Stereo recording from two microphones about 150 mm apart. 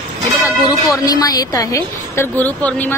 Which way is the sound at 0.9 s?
25° left (ahead or behind).